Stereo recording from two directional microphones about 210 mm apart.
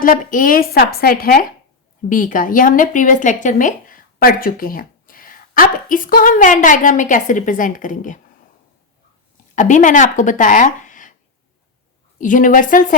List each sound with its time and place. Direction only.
0.0 s a woman's voice: 40° left (ahead or behind)
9.6 s speech: 35° left (ahead or behind)
12.2 s speech: 40° left (ahead or behind)